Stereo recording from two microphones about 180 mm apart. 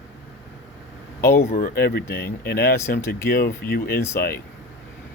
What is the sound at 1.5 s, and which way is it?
Speech, 60° left (ahead or behind).